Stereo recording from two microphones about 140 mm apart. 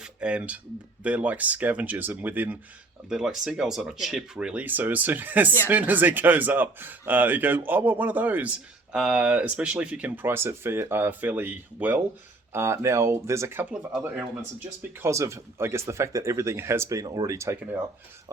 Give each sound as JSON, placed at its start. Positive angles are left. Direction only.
{"t": 0.0, "sound": "speech", "side_deg": -5}
{"t": 14.8, "sound": "speech", "side_deg": -20}